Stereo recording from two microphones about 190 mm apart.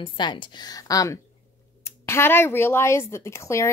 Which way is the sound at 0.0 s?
25° left (ahead or behind).